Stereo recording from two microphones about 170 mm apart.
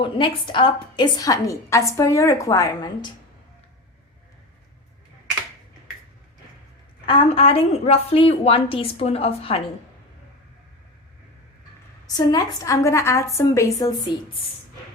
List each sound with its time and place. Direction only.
0.0 s a woman's voice: 30° left (ahead or behind)
7.0 s a woman's voice: 35° left (ahead or behind)
12.0 s a woman's voice: 20° left (ahead or behind)